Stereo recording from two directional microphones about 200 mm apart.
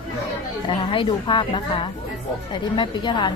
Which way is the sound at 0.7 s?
25° left (ahead or behind).